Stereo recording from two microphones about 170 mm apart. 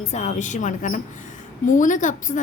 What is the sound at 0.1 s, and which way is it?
A woman's voice, 40° left (ahead or behind).